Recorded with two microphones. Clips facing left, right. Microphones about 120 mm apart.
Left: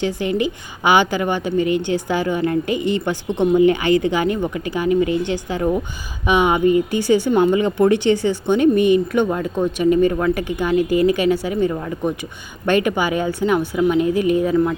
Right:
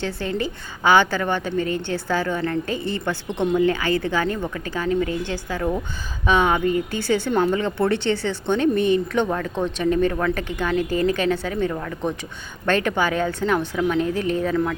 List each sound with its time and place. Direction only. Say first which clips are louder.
0.0 s speech: left 5 dB; 15° left (ahead or behind)